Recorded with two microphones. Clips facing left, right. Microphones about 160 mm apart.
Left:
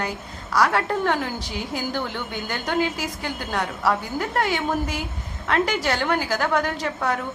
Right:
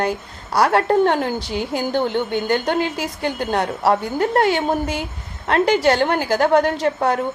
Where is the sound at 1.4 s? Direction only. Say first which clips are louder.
Right 6 dB; 70° right (ahead or behind).